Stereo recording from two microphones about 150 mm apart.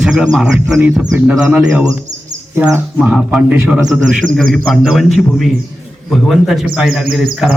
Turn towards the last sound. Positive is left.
turn(degrees=-5)  # may be behind; listen again after turning